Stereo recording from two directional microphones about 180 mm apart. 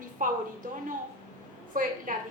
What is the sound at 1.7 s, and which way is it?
Speech, 50° right (ahead or behind).